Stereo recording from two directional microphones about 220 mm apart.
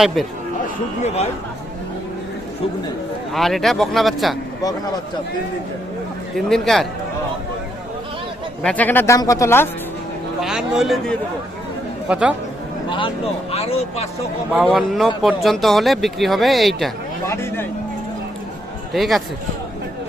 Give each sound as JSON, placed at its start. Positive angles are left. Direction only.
{"t": 1.0, "sound": "speech", "side_deg": 30}
{"t": 3.3, "sound": "speech", "side_deg": 0}
{"t": 6.3, "sound": "speech", "side_deg": 0}
{"t": 8.6, "sound": "speech", "side_deg": 5}
{"t": 10.4, "sound": "speech", "side_deg": 0}
{"t": 12.9, "sound": "speech", "side_deg": 25}
{"t": 14.5, "sound": "speech", "side_deg": 0}
{"t": 17.2, "sound": "speech", "side_deg": 10}
{"t": 18.9, "sound": "speech", "side_deg": 0}